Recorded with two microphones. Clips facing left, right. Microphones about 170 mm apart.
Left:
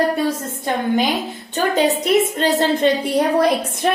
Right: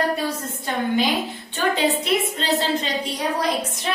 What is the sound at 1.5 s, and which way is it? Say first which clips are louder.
A woman's voice: left 4 dB; 45° left (ahead or behind).